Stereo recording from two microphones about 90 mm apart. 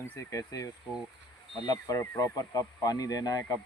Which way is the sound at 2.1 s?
45° left (ahead or behind).